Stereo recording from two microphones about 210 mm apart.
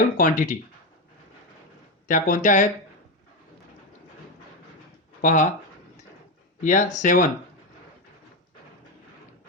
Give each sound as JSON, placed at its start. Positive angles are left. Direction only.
{"t": 0.2, "sound": "speech", "side_deg": 40}
{"t": 2.0, "sound": "speech", "side_deg": 40}
{"t": 5.2, "sound": "speech", "side_deg": 40}
{"t": 6.6, "sound": "speech", "side_deg": 35}